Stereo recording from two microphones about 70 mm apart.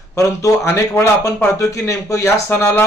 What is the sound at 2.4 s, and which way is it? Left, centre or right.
Speech, left.